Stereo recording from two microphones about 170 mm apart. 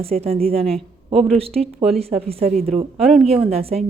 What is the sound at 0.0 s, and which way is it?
Speech, 35° right (ahead or behind).